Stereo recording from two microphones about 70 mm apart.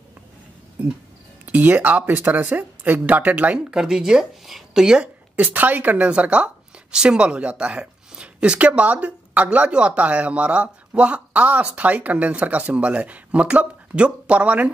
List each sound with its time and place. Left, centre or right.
1.4 s a woman's voice: right
3.5 s speech: centre
5.3 s a woman's voice: right